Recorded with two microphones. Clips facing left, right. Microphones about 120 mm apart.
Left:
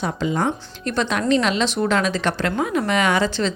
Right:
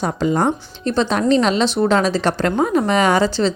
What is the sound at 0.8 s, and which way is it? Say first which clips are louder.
A woman's voice: right 4 dB; 30° right (ahead or behind).